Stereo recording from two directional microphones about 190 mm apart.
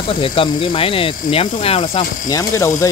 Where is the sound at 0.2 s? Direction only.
30° left (ahead or behind).